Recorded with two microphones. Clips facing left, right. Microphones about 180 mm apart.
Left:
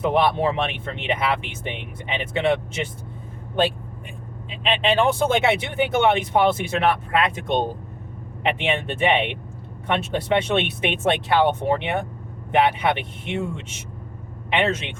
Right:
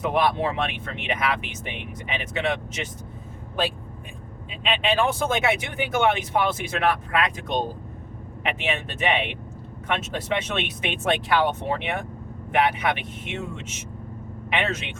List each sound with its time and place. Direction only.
0.0 s speech: 25° left (ahead or behind)
4.4 s speech: 30° left (ahead or behind)
8.4 s speech: 30° left (ahead or behind)